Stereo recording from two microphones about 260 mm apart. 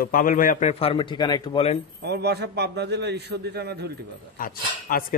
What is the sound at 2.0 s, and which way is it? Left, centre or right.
A man's voice, right.